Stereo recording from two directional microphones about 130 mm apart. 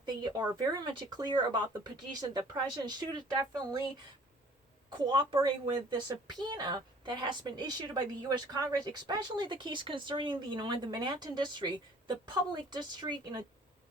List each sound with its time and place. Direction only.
0.0 s a woman's voice: 35° right (ahead or behind)
4.9 s a woman's voice: 35° right (ahead or behind)